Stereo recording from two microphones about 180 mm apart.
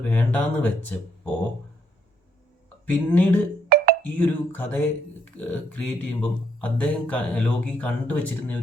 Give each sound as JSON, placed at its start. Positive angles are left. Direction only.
{"t": 0.0, "sound": "speech", "side_deg": 10}
{"t": 2.8, "sound": "speech", "side_deg": 10}
{"t": 3.7, "sound": "music", "side_deg": -60}
{"t": 4.0, "sound": "speech", "side_deg": 10}